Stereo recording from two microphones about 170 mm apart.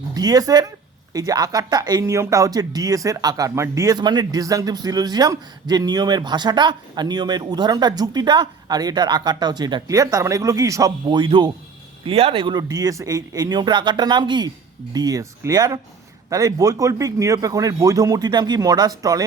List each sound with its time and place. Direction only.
0.1 s speech: 20° right (ahead or behind)